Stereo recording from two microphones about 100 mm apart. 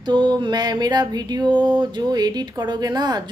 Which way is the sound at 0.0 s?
45° right (ahead or behind).